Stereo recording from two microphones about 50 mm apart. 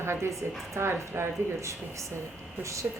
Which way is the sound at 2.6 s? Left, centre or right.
Right.